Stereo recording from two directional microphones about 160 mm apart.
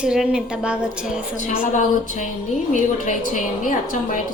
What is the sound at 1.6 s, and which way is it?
A woman's voice, 55° left (ahead or behind).